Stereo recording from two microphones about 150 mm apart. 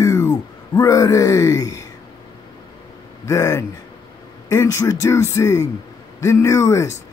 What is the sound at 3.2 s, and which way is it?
A man's voice, 20° left (ahead or behind).